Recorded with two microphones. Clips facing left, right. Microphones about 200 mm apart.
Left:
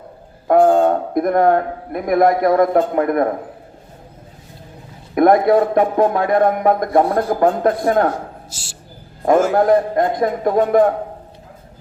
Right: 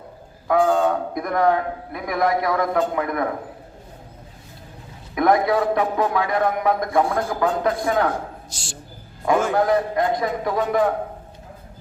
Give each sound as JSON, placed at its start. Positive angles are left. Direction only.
{"t": 0.4, "sound": "a man's voice", "side_deg": 55}
{"t": 5.1, "sound": "a man's voice", "side_deg": 50}
{"t": 8.4, "sound": "a man's voice", "side_deg": 5}
{"t": 9.6, "sound": "a man's voice", "side_deg": 50}